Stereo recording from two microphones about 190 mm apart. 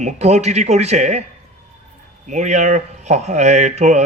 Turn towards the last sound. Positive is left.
turn(degrees=-35)  # may be behind; listen again after turning